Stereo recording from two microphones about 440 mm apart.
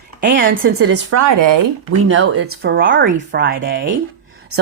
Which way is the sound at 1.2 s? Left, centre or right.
Right.